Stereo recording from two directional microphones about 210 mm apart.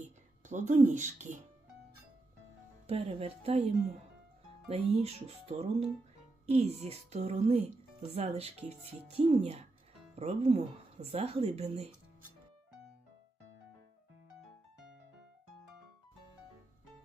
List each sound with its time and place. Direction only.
0.4 s speech: 35° right (ahead or behind)
2.8 s speech: 30° right (ahead or behind)